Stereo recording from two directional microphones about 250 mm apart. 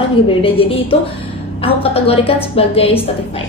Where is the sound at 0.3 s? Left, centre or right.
Left.